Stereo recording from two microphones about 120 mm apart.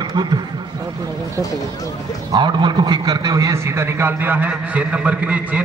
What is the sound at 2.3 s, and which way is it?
A man's voice, 40° right (ahead or behind).